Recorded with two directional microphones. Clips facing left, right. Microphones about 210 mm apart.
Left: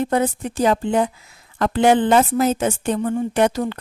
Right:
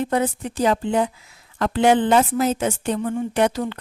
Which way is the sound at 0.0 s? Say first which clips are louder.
Left 2 dB; 45° left (ahead or behind).